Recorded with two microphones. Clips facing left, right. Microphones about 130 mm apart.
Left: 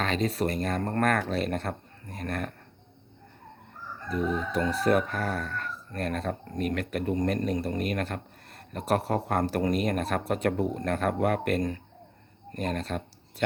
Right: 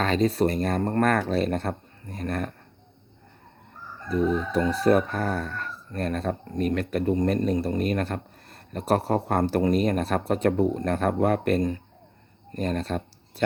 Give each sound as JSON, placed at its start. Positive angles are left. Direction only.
{"t": 0.0, "sound": "speech", "side_deg": -35}
{"t": 4.1, "sound": "speech", "side_deg": -30}
{"t": 12.5, "sound": "a sound", "side_deg": -35}